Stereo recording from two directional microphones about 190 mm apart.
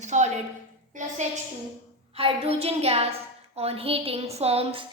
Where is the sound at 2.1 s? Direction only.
30° right (ahead or behind).